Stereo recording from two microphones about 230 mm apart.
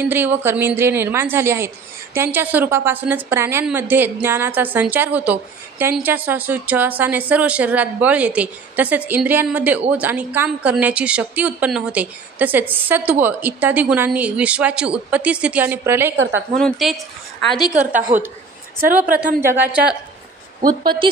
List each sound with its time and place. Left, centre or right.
0.0 s a woman's voice: centre
16.2 s a woman's voice: right
16.5 s a woman's voice: centre
18.1 s a woman's voice: right
19.4 s a woman's voice: centre
20.6 s a woman's voice: centre